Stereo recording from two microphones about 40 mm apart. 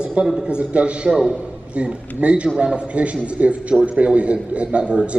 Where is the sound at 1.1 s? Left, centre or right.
Centre.